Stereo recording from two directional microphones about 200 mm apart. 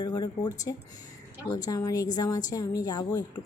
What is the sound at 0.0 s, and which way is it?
A woman's voice, 20° left (ahead or behind).